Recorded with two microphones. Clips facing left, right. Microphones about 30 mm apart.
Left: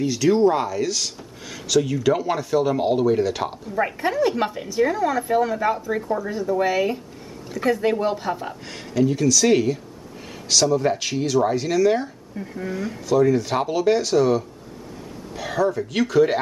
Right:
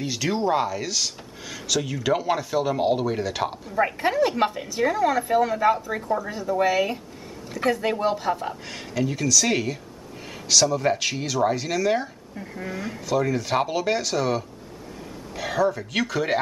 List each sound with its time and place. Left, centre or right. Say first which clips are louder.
0.0 s speech: left 7 dB; centre